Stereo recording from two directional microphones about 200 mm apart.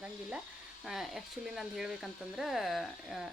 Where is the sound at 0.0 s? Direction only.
5° right (ahead or behind).